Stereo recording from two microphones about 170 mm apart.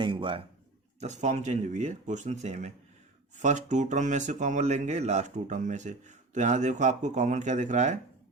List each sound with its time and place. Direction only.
0.0 s a man's voice: 30° right (ahead or behind)
0.9 s speech: 45° right (ahead or behind)